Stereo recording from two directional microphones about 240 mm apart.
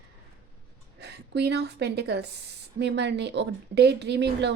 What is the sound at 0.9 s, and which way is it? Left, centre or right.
A woman's voice, right.